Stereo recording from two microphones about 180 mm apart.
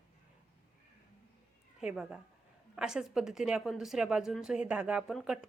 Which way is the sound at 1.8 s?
5° right (ahead or behind).